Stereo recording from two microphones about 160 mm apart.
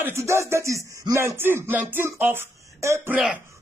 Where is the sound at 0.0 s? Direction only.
15° right (ahead or behind).